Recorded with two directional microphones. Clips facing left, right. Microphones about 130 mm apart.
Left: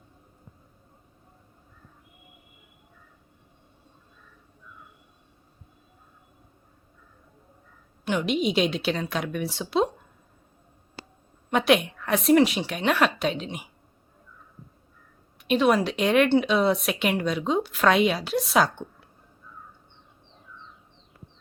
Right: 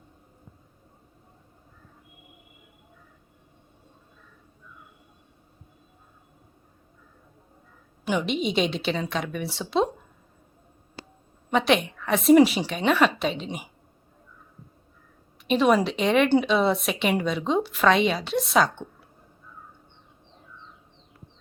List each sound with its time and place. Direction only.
8.0 s a woman's voice: centre (ahead or behind)
11.5 s a woman's voice: 5° left (ahead or behind)
15.4 s a woman's voice: centre (ahead or behind)